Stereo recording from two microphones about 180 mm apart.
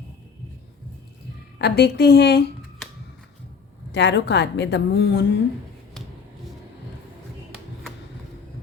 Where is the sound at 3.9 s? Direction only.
70° left (ahead or behind).